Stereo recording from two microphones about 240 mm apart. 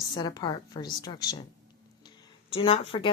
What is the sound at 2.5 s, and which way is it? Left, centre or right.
Speech, left.